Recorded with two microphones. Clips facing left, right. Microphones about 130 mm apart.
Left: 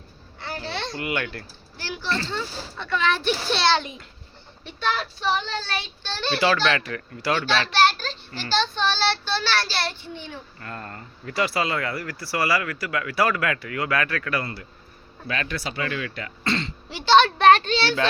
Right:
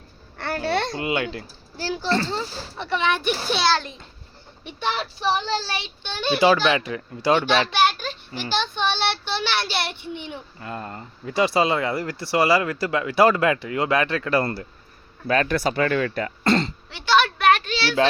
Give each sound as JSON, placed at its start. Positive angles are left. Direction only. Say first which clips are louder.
{"t": 0.3, "sound": "babbling", "louder": "right 8 dB", "side_deg": -60}
{"t": 0.9, "sound": "speech", "louder": "right 3 dB", "side_deg": -20}
{"t": 1.8, "sound": "speech", "louder": "right 5 dB", "side_deg": -35}
{"t": 4.6, "sound": "speech", "louder": "even", "side_deg": -20}
{"t": 17.1, "sound": "a sound", "louder": "left 3 dB", "side_deg": 30}